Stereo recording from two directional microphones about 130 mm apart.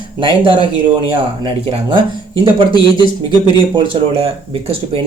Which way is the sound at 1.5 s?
45° right (ahead or behind).